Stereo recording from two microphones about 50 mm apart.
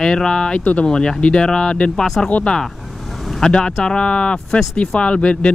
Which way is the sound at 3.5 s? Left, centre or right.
Centre.